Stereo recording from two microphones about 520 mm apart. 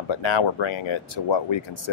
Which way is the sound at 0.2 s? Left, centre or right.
Left.